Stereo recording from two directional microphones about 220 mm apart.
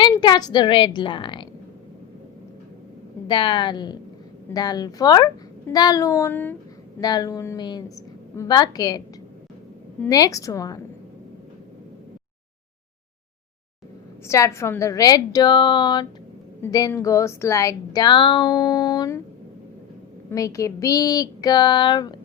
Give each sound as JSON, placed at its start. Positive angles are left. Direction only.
{"t": 0.0, "sound": "a woman's voice", "side_deg": 20}
{"t": 3.2, "sound": "a woman's voice", "side_deg": 20}
{"t": 10.0, "sound": "a woman's voice", "side_deg": 15}
{"t": 14.3, "sound": "a woman's voice", "side_deg": 15}
{"t": 20.3, "sound": "a woman's voice", "side_deg": 15}